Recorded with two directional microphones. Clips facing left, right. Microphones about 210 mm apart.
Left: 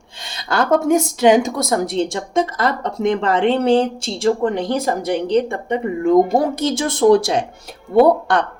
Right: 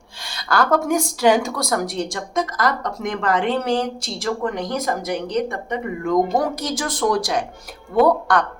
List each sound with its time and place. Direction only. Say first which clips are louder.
0.2 s a woman's voice: left 1 dB; 20° left (ahead or behind)